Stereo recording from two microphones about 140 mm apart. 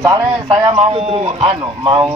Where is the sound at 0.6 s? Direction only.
35° right (ahead or behind).